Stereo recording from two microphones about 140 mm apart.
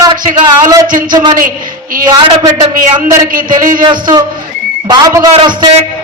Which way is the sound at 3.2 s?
75° right (ahead or behind).